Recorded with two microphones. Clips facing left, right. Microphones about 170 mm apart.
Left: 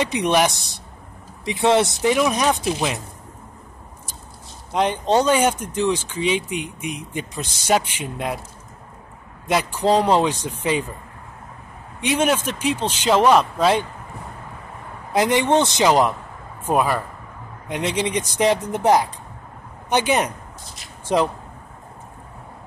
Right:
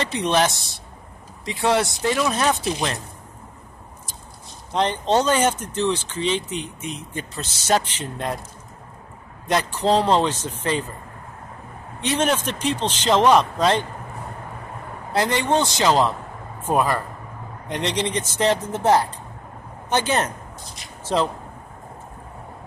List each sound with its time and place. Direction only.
0.3 s speech: 15° left (ahead or behind)
4.7 s speech: 10° left (ahead or behind)
9.5 s speech: 10° left (ahead or behind)
12.0 s speech: 10° left (ahead or behind)
15.1 s a man's voice: 15° left (ahead or behind)